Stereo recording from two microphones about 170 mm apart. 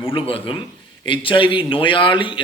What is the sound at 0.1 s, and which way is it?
A man's voice, 30° left (ahead or behind).